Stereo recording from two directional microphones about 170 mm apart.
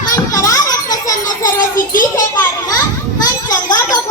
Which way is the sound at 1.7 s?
55° left (ahead or behind).